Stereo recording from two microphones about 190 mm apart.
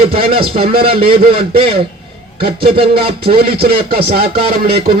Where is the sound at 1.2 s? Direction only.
55° right (ahead or behind).